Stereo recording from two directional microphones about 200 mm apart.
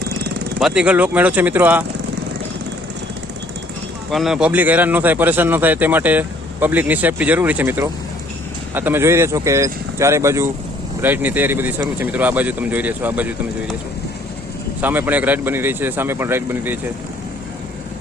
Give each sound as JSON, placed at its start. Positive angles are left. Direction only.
{"t": 0.6, "sound": "speech", "side_deg": -5}
{"t": 4.1, "sound": "speech", "side_deg": 0}
{"t": 14.8, "sound": "speech", "side_deg": -10}